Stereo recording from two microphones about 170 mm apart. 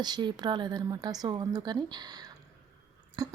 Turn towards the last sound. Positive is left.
turn(degrees=-25)  # may be behind; listen again after turning